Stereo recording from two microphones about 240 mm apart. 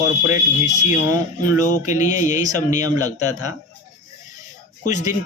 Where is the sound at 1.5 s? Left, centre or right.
Left.